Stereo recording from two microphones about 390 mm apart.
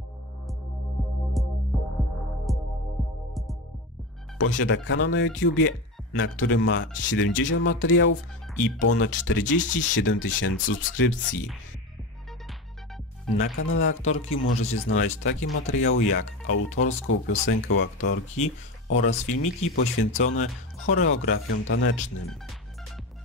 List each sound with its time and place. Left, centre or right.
1.4 s music: centre
4.4 s speech: left
13.4 s speech: left